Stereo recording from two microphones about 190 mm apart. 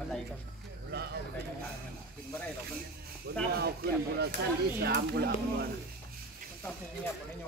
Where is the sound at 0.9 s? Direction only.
60° right (ahead or behind).